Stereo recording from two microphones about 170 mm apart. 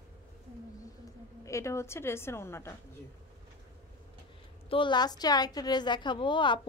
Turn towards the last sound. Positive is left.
turn(degrees=30)  # may be behind; listen again after turning